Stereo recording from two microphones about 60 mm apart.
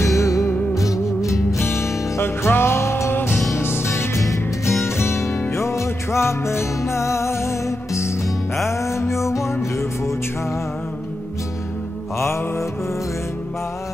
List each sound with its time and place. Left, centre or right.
0.0 s music: left
1.6 s music: left
12.2 s mantra: left